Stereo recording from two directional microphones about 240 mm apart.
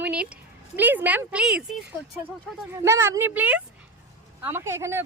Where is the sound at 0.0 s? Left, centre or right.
Centre.